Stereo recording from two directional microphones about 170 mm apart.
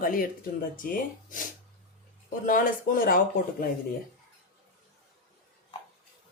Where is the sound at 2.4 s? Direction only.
55° left (ahead or behind).